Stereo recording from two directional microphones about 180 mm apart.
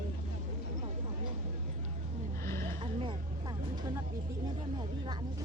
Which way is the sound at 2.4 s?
15° left (ahead or behind).